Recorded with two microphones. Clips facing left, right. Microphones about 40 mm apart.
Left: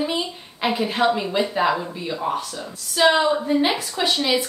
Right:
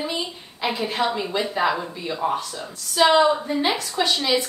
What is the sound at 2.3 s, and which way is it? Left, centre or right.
Speech, right.